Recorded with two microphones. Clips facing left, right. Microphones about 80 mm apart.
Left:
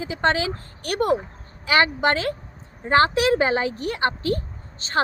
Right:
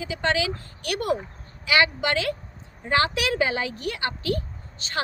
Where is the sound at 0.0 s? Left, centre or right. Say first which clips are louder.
Left 3 dB; left.